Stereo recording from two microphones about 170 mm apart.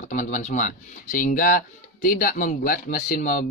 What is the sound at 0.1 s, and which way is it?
Speech, 45° left (ahead or behind).